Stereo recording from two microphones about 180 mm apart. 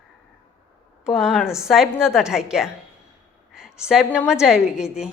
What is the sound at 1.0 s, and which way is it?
A woman's voice, centre (ahead or behind).